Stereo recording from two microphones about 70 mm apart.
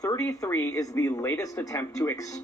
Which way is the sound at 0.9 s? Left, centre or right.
Left.